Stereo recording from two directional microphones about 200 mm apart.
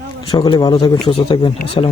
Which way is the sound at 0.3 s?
20° left (ahead or behind).